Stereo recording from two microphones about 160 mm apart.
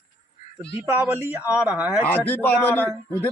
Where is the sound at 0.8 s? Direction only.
10° right (ahead or behind).